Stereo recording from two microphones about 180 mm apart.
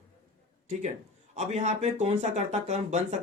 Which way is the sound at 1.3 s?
40° right (ahead or behind).